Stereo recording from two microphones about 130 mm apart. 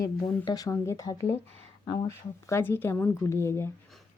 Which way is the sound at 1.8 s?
35° left (ahead or behind).